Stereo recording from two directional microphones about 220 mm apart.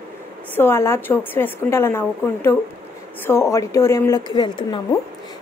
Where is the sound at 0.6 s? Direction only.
10° left (ahead or behind).